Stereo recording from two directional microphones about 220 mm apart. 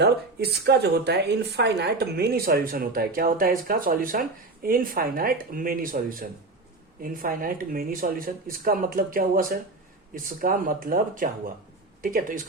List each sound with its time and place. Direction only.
0.0 s speech: 50° right (ahead or behind)